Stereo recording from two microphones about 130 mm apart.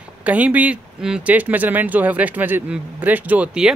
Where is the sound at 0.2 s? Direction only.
10° right (ahead or behind).